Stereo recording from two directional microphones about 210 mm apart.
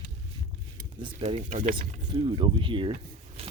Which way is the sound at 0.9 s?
25° right (ahead or behind).